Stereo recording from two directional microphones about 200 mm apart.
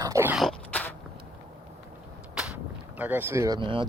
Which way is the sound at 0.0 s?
15° right (ahead or behind).